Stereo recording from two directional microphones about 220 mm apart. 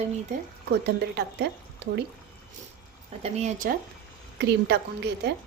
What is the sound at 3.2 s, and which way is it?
Speech, 30° right (ahead or behind).